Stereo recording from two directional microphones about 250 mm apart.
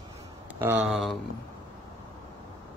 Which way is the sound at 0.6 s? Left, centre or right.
Centre.